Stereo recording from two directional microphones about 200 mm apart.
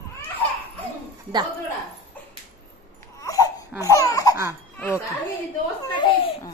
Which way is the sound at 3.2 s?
15° left (ahead or behind).